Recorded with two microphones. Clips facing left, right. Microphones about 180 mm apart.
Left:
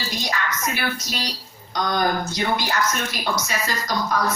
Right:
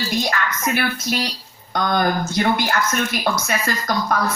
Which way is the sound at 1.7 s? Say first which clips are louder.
Right 3 dB; 55° right (ahead or behind).